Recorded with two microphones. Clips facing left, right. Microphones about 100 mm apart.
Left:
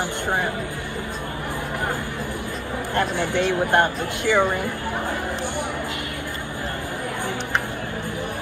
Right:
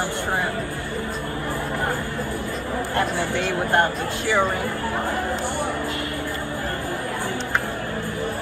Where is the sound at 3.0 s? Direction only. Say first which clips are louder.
Left 3 dB; 20° left (ahead or behind).